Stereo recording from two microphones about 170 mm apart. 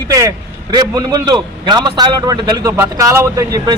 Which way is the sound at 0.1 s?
20° right (ahead or behind).